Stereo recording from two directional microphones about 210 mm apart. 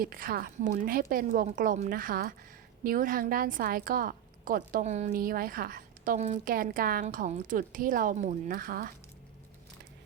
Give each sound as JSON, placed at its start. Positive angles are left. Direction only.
{"t": 0.0, "sound": "a woman's voice", "side_deg": -45}